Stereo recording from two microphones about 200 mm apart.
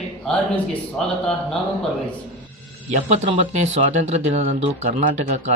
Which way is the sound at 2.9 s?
35° right (ahead or behind).